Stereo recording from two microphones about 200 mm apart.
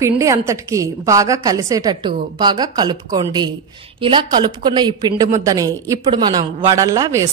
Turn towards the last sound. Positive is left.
turn(degrees=-15)  # may be behind; listen again after turning